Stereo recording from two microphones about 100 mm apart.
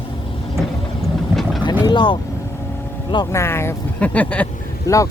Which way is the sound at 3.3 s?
25° left (ahead or behind).